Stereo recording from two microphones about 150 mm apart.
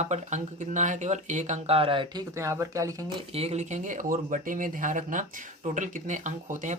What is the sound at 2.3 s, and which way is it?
Speech, 20° right (ahead or behind).